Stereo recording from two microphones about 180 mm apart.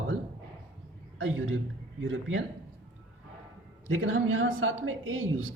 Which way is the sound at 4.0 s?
90° right.